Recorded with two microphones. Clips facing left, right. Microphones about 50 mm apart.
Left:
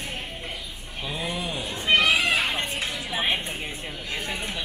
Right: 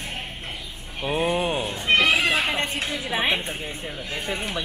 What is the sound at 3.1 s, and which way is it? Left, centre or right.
Speech, right.